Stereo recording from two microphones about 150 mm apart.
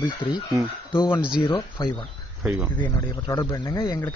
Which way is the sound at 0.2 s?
35° left (ahead or behind).